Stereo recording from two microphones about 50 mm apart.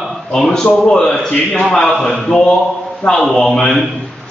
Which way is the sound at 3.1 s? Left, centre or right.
Centre.